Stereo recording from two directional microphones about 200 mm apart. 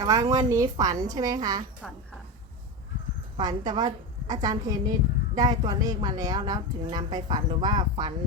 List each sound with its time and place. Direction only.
0.0 s a woman's voice: 15° right (ahead or behind)
3.3 s a woman's voice: 20° right (ahead or behind)